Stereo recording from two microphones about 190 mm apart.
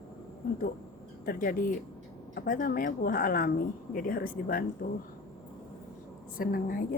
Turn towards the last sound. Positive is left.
turn(degrees=50)  # may be behind; listen again after turning